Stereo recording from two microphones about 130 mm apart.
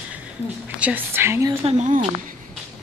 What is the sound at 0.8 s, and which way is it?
Speech, 15° right (ahead or behind).